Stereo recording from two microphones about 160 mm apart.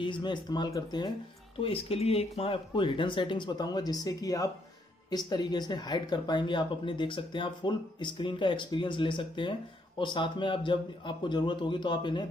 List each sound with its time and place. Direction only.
0.0 s speech: 30° left (ahead or behind)
1.6 s speech: 35° left (ahead or behind)